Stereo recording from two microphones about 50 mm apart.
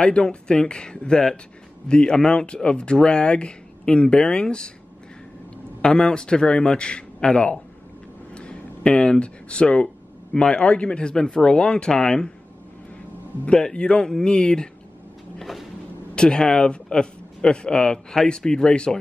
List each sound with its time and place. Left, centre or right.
0.0 s speech: centre
5.8 s speech: centre
8.4 s a sound: centre
10.3 s speech: centre
13.5 s speech: centre
15.3 s cupboard open or close: centre
16.2 s speech: centre